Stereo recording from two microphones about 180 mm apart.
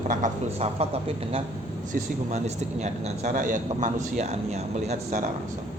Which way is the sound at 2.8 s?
45° right (ahead or behind).